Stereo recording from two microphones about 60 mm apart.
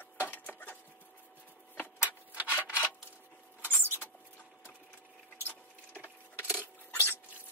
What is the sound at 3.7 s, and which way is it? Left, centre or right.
Rodents, left.